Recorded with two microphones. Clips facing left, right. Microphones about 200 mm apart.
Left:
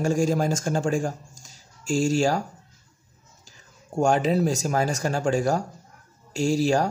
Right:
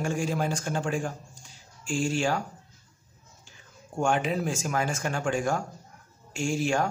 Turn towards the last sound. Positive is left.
turn(degrees=35)  # may be behind; listen again after turning